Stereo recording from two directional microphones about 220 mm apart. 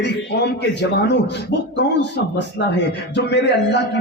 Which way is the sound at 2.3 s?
50° left (ahead or behind).